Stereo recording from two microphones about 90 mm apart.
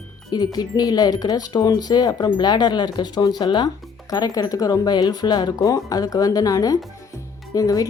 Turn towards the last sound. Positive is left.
turn(degrees=40)  # may be behind; listen again after turning